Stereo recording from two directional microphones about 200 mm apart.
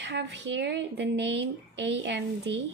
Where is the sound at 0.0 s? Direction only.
60° right (ahead or behind).